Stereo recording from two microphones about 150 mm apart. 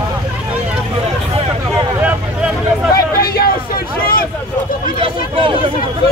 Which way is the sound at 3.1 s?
80° left.